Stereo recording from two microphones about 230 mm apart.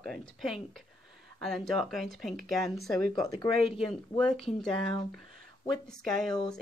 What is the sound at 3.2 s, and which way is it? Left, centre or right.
Speech, centre.